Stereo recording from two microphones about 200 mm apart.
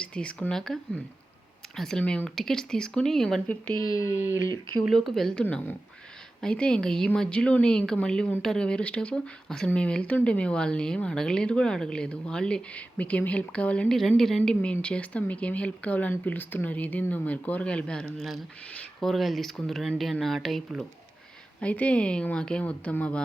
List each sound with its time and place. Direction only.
0.0 s a woman's voice: 5° left (ahead or behind)
3.8 s speech: 15° left (ahead or behind)
4.9 s a woman's voice: centre (ahead or behind)